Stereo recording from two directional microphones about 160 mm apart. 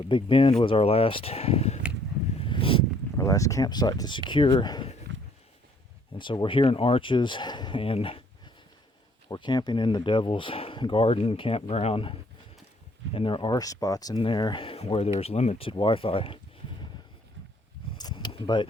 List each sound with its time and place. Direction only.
0.1 s speech: 30° left (ahead or behind)
2.4 s a sound: 35° left (ahead or behind)
3.2 s speech: 20° left (ahead or behind)
6.1 s speech: 30° left (ahead or behind)
9.3 s speech: 25° left (ahead or behind)
17.9 s a sound: 25° left (ahead or behind)